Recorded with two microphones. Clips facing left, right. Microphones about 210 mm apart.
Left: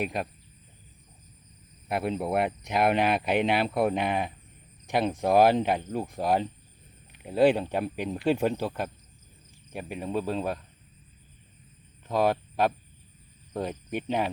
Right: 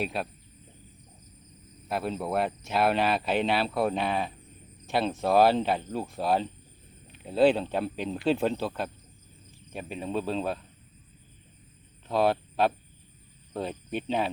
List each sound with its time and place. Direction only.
0.0 s speech: 15° left (ahead or behind)
1.9 s speech: 20° left (ahead or behind)
12.0 s speech: 15° left (ahead or behind)